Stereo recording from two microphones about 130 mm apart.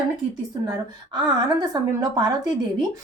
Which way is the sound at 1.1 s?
30° right (ahead or behind).